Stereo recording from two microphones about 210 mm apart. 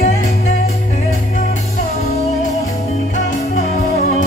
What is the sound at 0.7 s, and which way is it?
Music, 35° left (ahead or behind).